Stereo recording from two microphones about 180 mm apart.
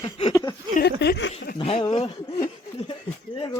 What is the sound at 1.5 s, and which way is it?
Speech, 30° left (ahead or behind).